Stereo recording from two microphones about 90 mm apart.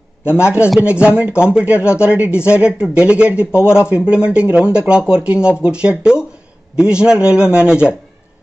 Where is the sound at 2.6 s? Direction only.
10° right (ahead or behind).